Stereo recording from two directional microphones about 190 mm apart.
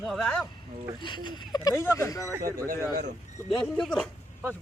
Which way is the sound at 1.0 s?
25° left (ahead or behind).